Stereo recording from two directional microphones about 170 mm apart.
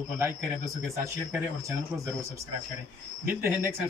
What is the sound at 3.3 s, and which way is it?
Speech, 15° right (ahead or behind).